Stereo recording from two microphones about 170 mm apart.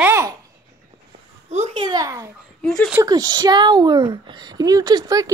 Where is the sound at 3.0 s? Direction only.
25° right (ahead or behind).